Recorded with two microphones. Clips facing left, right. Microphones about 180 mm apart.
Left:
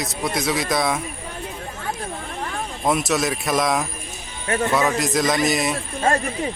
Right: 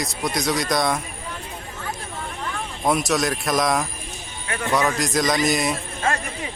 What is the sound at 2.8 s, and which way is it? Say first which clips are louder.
A man's voice: even; centre (ahead or behind).